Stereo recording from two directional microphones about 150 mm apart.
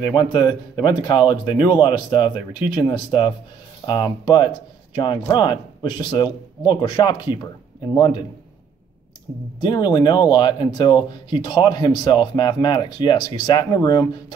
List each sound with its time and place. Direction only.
0.1 s speech: 30° left (ahead or behind)
9.6 s speech: 30° left (ahead or behind)